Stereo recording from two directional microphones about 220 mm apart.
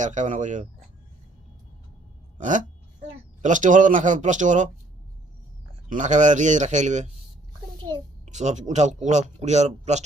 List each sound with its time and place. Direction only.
0.0 s speech: 35° right (ahead or behind)
2.4 s speech: 35° right (ahead or behind)
5.9 s speech: 35° right (ahead or behind)
7.8 s a child's voice: 20° right (ahead or behind)
8.2 s speech: 30° right (ahead or behind)